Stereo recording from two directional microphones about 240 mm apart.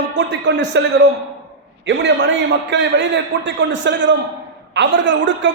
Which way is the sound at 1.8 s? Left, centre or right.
Right.